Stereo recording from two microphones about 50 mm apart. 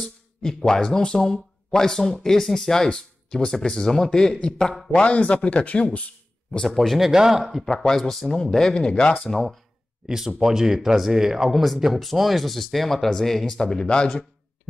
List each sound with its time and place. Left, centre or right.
0.0 s speech: centre; by 5.9 s left
5.9 s a sound: left
6.6 s speech: centre
7.1 s speech: centre
7.7 s speech: centre
10.0 s speech: centre